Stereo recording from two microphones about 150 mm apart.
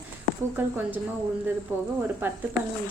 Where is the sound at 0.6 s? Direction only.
10° right (ahead or behind).